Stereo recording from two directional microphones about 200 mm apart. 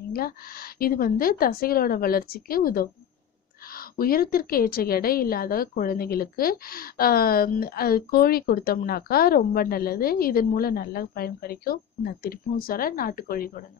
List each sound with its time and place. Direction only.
0.1 s a woman's voice: 50° left (ahead or behind)